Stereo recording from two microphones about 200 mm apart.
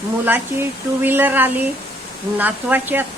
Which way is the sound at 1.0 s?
10° right (ahead or behind).